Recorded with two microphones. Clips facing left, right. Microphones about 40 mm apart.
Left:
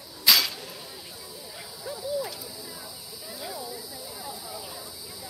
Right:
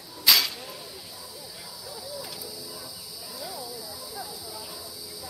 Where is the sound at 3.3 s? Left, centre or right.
Left.